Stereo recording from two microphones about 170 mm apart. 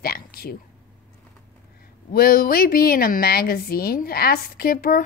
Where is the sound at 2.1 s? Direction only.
60° left (ahead or behind).